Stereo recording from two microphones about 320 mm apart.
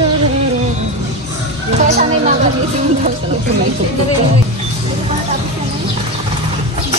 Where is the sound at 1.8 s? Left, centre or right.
Right.